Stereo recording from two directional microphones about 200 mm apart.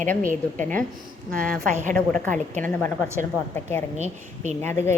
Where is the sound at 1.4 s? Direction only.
40° right (ahead or behind).